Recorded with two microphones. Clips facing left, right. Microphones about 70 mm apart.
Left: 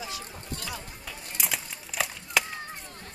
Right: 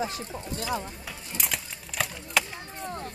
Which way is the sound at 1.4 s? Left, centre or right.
Centre.